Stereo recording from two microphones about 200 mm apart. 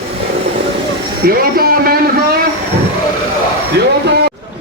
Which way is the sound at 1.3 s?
45° right (ahead or behind).